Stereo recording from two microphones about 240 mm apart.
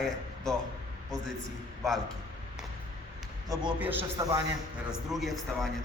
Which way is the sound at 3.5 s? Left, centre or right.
Centre.